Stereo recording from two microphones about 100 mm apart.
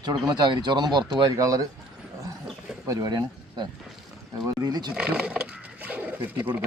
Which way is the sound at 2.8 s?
35° right (ahead or behind).